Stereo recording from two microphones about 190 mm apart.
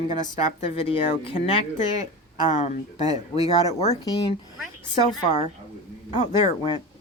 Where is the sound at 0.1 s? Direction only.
30° left (ahead or behind).